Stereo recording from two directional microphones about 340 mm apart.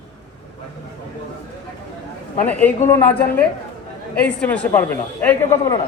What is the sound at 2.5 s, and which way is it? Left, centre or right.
Speech, centre.